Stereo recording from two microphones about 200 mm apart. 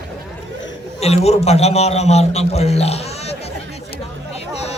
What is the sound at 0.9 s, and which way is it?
A man's voice, 30° left (ahead or behind).